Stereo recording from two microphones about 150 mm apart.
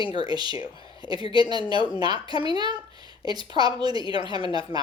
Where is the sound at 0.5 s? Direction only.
35° left (ahead or behind).